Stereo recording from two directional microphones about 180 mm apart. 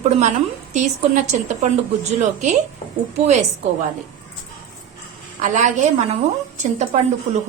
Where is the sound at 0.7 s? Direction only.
40° right (ahead or behind).